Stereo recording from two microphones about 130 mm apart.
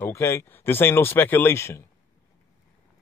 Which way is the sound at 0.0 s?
20° left (ahead or behind).